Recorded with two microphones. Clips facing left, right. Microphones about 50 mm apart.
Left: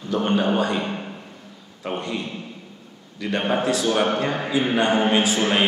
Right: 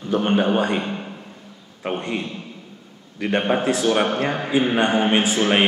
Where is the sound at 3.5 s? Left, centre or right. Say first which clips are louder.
Right 1 dB; right.